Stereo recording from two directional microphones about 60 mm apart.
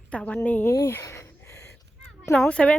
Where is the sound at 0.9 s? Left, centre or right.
Left.